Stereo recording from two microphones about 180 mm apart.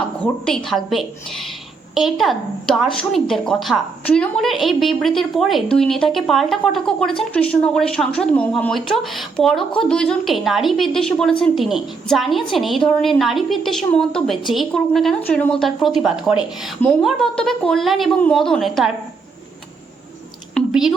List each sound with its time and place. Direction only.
0.4 s speech: centre (ahead or behind)
20.6 s drip: centre (ahead or behind)